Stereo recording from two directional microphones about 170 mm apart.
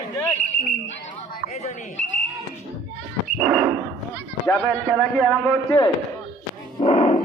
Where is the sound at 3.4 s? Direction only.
5° left (ahead or behind).